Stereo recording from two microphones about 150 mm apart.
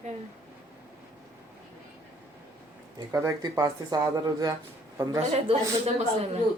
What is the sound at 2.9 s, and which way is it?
Speech, 25° right (ahead or behind).